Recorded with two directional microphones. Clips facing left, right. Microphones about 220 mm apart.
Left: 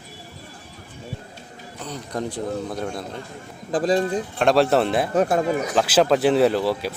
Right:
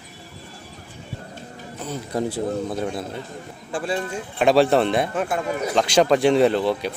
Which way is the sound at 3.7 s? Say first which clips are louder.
Left 6 dB; 35° left (ahead or behind).